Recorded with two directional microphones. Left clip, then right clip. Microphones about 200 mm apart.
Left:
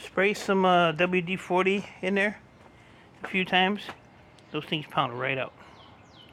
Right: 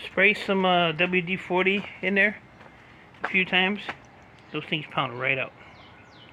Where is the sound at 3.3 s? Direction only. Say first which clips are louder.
Right 1 dB; 15° left (ahead or behind).